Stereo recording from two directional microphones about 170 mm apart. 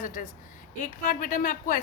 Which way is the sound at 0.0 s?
50° left (ahead or behind).